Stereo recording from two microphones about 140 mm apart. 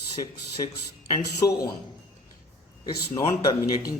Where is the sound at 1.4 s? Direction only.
25° left (ahead or behind).